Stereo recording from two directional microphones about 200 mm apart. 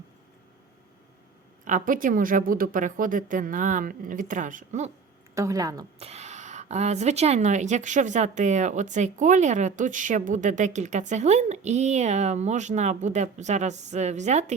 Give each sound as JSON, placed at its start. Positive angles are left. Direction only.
{"t": 1.6, "sound": "a woman's voice", "side_deg": -40}
{"t": 5.3, "sound": "speech", "side_deg": -15}
{"t": 6.0, "sound": "a woman's voice", "side_deg": -30}